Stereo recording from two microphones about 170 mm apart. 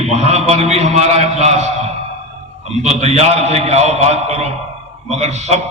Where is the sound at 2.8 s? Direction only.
40° right (ahead or behind).